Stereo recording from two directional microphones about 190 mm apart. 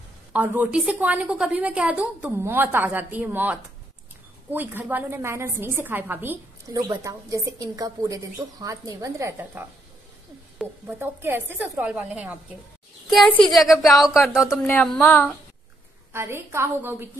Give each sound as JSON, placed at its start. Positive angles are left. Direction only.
{"t": 0.3, "sound": "a woman's voice", "side_deg": -10}
{"t": 11.0, "sound": "a woman's voice", "side_deg": -10}
{"t": 16.1, "sound": "a woman's voice", "side_deg": -10}